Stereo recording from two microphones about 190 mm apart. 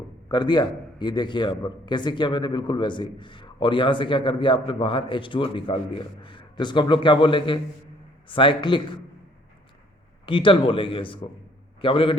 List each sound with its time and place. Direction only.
0.3 s a man's voice: 20° left (ahead or behind)
10.2 s a man's voice: 25° left (ahead or behind)